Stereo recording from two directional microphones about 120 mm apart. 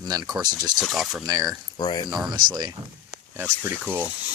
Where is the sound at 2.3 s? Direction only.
35° right (ahead or behind).